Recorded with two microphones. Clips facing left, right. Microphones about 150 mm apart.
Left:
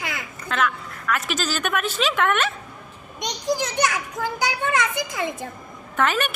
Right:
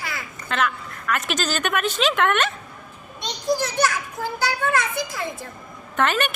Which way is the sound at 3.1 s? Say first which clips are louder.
Right 1 dB; 15° left (ahead or behind).